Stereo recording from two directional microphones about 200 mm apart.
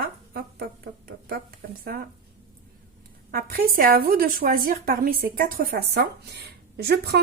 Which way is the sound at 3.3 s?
50° right (ahead or behind).